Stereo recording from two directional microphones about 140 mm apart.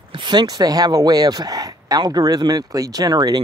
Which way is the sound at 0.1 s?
35° right (ahead or behind).